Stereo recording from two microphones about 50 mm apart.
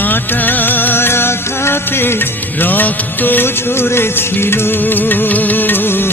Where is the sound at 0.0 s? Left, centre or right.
Left.